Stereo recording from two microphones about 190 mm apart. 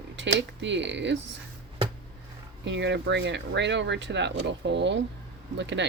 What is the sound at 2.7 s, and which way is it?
Speech, 70° right (ahead or behind).